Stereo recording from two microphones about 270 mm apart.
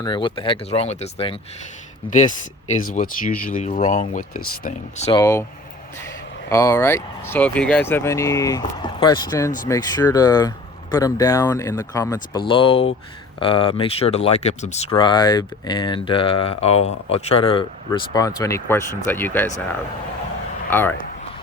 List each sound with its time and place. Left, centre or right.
0.0 s speech: centre
5.2 s speech: centre
6.5 s speech: centre
20.7 s speech: centre